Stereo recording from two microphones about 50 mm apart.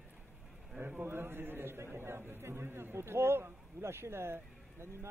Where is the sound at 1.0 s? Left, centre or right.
Right.